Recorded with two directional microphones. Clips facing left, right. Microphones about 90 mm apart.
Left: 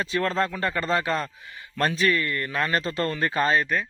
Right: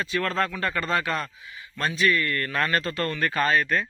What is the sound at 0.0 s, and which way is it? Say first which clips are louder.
Speech: left 1 dB; 30° left (ahead or behind).